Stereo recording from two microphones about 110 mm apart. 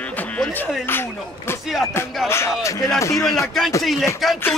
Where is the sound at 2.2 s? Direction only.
25° left (ahead or behind).